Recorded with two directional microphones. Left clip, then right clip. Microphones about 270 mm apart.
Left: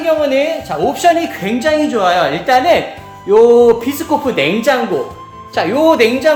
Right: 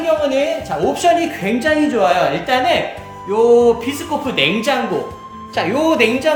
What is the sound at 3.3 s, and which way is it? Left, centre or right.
Music, left.